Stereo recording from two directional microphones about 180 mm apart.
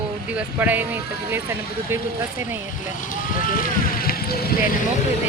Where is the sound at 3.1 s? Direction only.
50° left (ahead or behind).